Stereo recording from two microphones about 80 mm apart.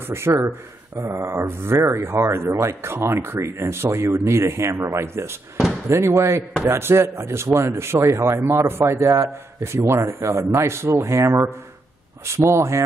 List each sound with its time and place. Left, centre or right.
0.1 s speech: right